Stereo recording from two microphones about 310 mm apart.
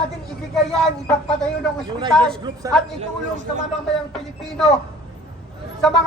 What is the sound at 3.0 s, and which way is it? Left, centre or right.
Speech, right.